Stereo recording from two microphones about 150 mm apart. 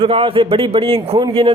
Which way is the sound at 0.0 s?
40° right (ahead or behind).